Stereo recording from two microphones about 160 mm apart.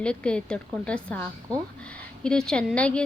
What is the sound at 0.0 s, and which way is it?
A woman's voice, 5° left (ahead or behind).